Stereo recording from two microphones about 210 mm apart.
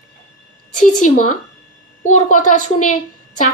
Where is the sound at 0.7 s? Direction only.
35° left (ahead or behind).